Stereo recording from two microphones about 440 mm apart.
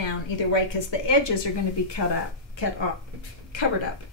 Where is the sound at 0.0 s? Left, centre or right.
Left.